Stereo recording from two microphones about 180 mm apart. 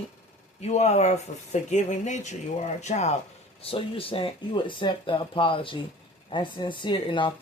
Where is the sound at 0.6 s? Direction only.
40° left (ahead or behind).